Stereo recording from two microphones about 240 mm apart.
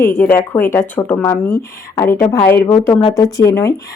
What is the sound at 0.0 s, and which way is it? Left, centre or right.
A woman's voice, centre.